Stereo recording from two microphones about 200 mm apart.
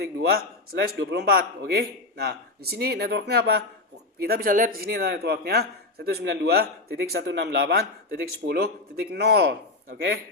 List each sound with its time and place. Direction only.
0.0 s a man's voice: 50° right (ahead or behind)